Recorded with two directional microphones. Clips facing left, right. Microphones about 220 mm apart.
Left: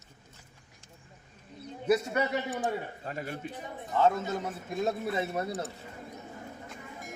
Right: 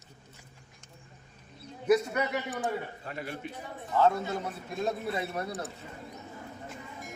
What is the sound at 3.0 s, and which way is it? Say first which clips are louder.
Speech: left 1 dB; 40° left (ahead or behind).